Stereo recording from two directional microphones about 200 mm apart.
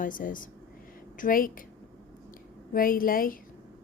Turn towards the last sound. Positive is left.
turn(degrees=45)  # may be behind; listen again after turning